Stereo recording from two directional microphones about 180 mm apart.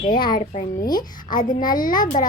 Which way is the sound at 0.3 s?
50° left (ahead or behind).